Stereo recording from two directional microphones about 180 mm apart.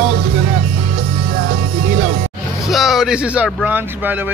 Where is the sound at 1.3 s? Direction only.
55° right (ahead or behind).